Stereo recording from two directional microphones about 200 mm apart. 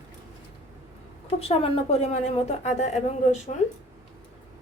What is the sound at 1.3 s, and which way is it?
A woman's voice, 30° left (ahead or behind).